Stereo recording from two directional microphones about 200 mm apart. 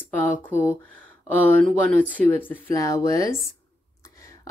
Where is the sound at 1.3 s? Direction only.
10° left (ahead or behind).